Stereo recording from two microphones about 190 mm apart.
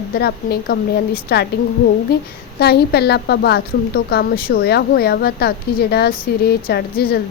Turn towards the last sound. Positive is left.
turn(degrees=55)  # may be behind; listen again after turning